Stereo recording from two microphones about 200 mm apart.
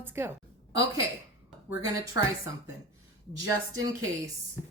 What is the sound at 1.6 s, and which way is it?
Speech, 15° right (ahead or behind).